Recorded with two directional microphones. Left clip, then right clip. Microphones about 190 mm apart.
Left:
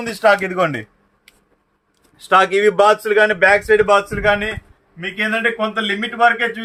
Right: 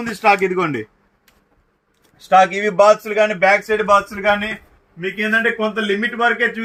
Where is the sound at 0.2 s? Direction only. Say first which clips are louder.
Left 1 dB; 65° left (ahead or behind).